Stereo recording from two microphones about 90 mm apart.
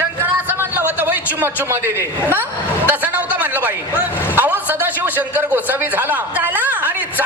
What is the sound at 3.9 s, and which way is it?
A man's voice, 20° right (ahead or behind).